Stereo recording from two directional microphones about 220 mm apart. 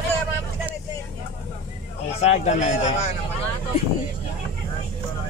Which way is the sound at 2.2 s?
30° left (ahead or behind).